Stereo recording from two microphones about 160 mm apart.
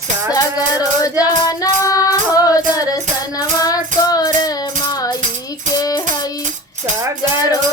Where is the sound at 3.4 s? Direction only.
20° left (ahead or behind).